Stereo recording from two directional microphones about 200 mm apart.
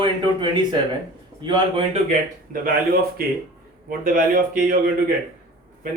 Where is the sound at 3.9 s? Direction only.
45° right (ahead or behind).